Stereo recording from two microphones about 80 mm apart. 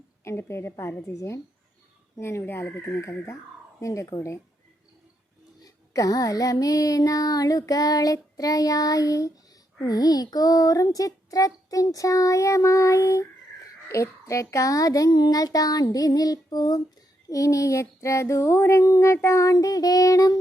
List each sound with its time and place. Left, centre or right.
0.3 s a woman's voice: left
2.1 s a woman's voice: left
5.6 s a sound: left